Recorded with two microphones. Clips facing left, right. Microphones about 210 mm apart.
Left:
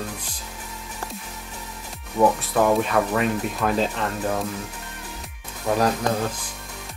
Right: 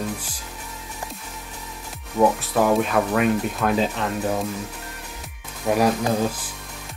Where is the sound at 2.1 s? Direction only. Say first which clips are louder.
Even; 5° right (ahead or behind).